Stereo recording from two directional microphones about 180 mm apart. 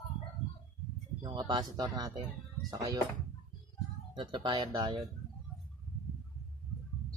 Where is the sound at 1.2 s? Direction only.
25° right (ahead or behind).